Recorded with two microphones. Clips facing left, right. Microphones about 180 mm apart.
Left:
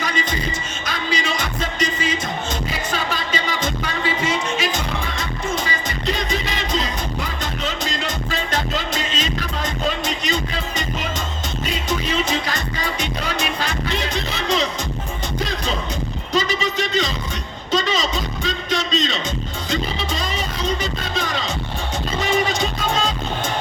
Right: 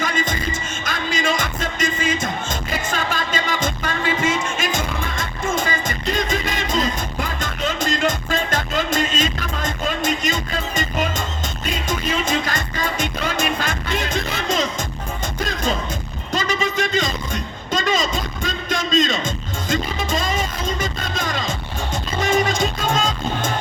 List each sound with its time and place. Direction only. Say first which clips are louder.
0.0 s music: right 1 dB; 50° right (ahead or behind)
16.3 s a sound: even; 50° right (ahead or behind)
20.8 s music: left 1 dB; 45° right (ahead or behind)